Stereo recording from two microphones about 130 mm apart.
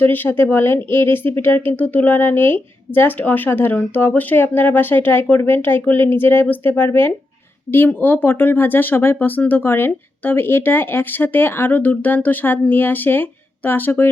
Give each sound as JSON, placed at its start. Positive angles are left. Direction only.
{"t": 0.0, "sound": "speech", "side_deg": 15}